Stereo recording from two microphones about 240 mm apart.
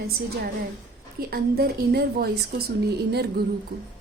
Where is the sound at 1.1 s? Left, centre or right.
Right.